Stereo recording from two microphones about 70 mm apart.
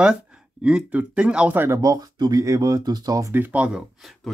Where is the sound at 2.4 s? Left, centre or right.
Right.